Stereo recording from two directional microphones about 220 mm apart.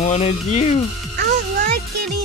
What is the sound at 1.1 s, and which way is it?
Music, 45° right (ahead or behind).